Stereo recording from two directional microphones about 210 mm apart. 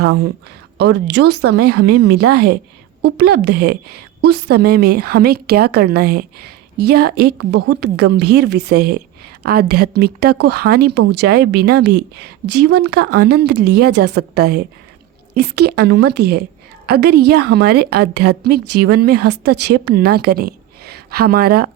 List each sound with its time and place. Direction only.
0.8 s a woman's voice: 50° right (ahead or behind)
1.3 s a woman's voice: 90° right
2.3 s a woman's voice: 50° right (ahead or behind)